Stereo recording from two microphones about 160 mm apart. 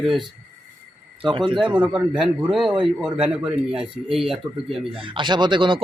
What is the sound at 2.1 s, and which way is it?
Speech, centre (ahead or behind).